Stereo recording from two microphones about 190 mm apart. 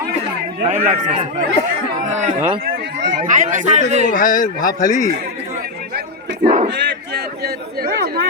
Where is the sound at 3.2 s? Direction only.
40° right (ahead or behind).